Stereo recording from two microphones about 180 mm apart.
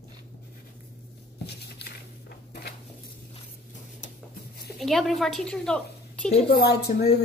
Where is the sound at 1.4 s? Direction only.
60° left (ahead or behind).